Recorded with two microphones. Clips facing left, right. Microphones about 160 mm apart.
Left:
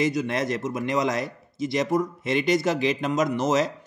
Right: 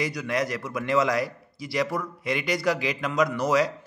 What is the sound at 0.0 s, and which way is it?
A man's voice, 20° left (ahead or behind).